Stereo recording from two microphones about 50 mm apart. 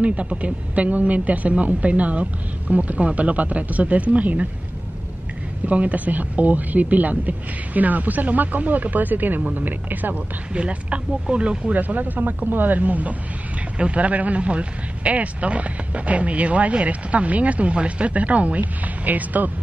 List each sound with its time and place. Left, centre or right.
0.0 s speech: right
5.7 s speech: right
10.5 s speech: right
11.7 s speech: right